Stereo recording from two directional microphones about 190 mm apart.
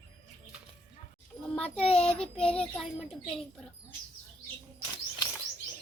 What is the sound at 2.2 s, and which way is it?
Speech, 5° left (ahead or behind).